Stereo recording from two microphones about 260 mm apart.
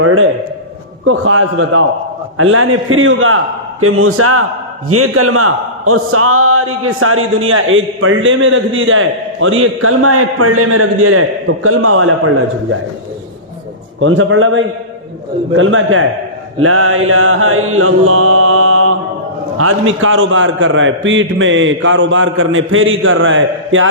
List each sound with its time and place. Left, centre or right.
0.0 s a man's voice: right
14.0 s a man's voice: right
16.6 s mantra: right
19.5 s a man's voice: right